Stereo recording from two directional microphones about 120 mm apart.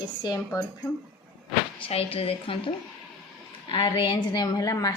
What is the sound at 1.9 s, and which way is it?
A woman's voice, 55° left (ahead or behind).